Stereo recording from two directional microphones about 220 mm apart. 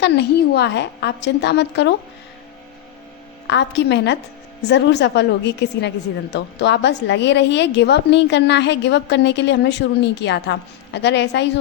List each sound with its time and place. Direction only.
0.0 s a woman's voice: 50° left (ahead or behind)
3.4 s a woman's voice: 50° left (ahead or behind)